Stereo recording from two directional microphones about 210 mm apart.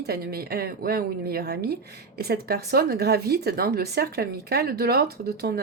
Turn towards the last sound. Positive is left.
turn(degrees=-45)  # may be behind; listen again after turning